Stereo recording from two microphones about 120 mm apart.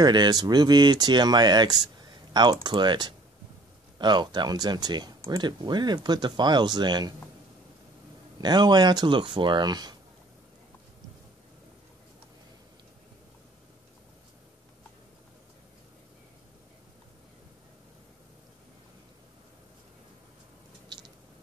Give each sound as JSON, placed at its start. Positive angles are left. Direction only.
{"t": 0.0, "sound": "speech", "side_deg": -35}
{"t": 8.4, "sound": "speech", "side_deg": -35}
{"t": 20.9, "sound": "squish", "side_deg": -35}